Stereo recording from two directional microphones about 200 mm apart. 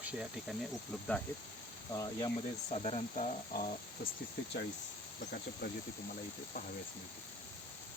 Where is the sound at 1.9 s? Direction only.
20° left (ahead or behind).